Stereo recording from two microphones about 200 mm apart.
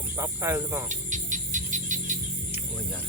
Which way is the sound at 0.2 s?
10° right (ahead or behind).